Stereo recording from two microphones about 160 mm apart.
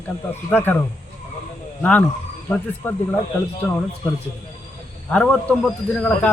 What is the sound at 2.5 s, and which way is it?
Speech, 10° left (ahead or behind).